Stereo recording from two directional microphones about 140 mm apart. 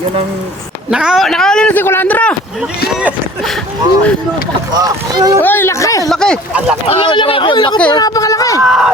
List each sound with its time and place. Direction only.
0.9 s a man's voice: 5° right (ahead or behind); by 2.3 s 10° left (ahead or behind)
4.7 s speech: 30° right (ahead or behind)
5.4 s speech: 15° left (ahead or behind)
6.1 s a sound: 5° left (ahead or behind)
6.5 s speech: 10° right (ahead or behind)
6.8 s speech: 35° left (ahead or behind)
8.6 s speech: centre (ahead or behind)